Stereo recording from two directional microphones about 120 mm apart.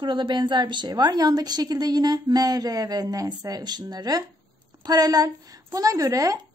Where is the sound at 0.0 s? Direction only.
40° right (ahead or behind).